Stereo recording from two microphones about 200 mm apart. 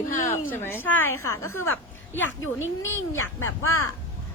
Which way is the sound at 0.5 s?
10° left (ahead or behind).